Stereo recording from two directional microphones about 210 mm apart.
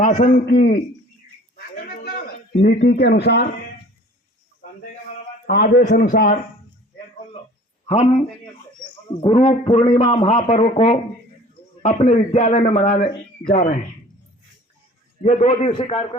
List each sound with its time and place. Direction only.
0.0 s a man's voice: 35° left (ahead or behind)
1.5 s a sound: 45° left (ahead or behind)
5.5 s a man's voice: 45° left (ahead or behind)
9.2 s a man's voice: 30° left (ahead or behind)
15.2 s a man's voice: 35° left (ahead or behind)